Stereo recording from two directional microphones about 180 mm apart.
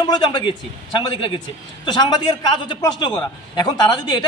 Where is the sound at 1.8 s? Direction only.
25° left (ahead or behind).